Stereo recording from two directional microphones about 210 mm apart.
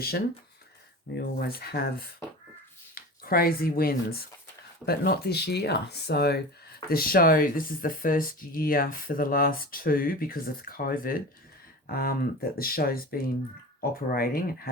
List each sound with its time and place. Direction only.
1.1 s speech: 45° left (ahead or behind)
2.9 s speech: 45° left (ahead or behind)